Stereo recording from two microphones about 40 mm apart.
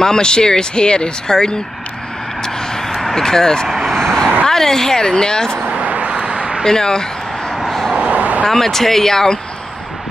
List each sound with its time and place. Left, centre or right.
0.0 s speech: centre
2.4 s vehicle: centre
3.2 s a woman's voice: centre
3.6 s vehicle: centre
4.5 s a woman's voice: centre
5.8 s a sound: right
6.6 s a sound: centre
7.5 s vehicle: centre
8.1 s vehicle: right
8.5 s a woman's voice: centre